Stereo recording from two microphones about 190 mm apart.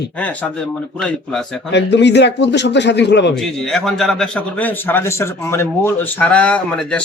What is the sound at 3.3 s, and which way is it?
A man's voice, 5° left (ahead or behind).